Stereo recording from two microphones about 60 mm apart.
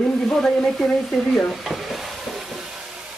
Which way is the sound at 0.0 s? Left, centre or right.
Centre.